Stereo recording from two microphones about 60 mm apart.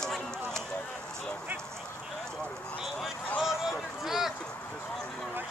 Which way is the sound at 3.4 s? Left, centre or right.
Centre.